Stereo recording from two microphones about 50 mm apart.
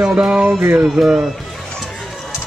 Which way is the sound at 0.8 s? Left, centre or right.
Centre.